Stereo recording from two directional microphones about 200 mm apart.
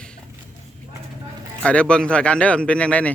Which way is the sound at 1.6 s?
5° left (ahead or behind).